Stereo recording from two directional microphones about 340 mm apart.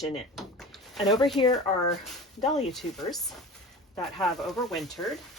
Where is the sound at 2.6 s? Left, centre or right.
Centre.